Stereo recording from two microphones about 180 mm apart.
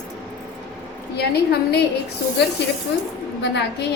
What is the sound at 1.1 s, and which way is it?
Speech, 65° left (ahead or behind).